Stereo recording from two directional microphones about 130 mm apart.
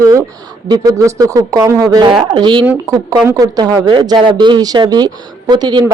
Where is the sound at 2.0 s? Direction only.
40° right (ahead or behind).